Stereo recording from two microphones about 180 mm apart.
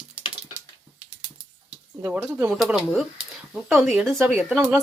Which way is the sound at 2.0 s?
5° right (ahead or behind).